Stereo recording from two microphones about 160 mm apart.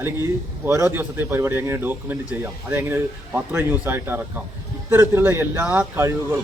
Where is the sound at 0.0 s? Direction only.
15° right (ahead or behind).